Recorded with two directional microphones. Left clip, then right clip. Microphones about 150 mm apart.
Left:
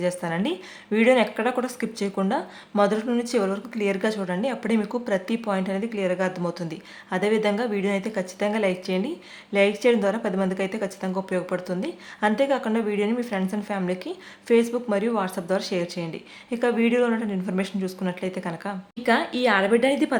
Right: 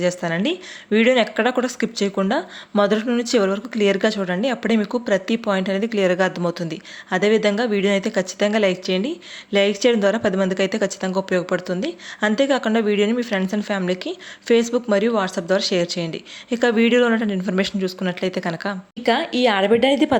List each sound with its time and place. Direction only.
0.0 s speech: 25° right (ahead or behind)